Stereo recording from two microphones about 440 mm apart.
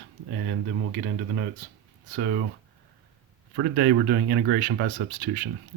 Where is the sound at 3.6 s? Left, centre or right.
Right.